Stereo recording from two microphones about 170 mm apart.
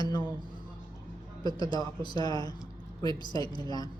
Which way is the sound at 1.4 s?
25° left (ahead or behind).